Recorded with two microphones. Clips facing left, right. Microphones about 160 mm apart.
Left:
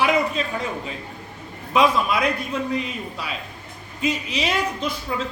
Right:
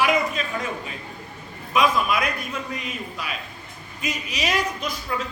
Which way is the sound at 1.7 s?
30° left (ahead or behind).